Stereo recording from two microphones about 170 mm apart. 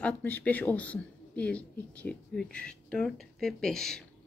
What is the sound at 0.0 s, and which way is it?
Speech, 10° left (ahead or behind).